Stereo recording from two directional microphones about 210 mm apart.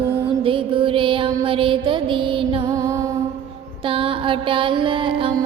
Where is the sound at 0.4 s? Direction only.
25° right (ahead or behind).